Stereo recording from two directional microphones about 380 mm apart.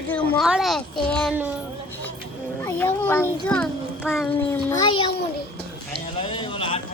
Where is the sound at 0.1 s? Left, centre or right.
Centre.